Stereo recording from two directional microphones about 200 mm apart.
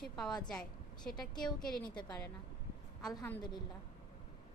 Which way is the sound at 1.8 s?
20° left (ahead or behind).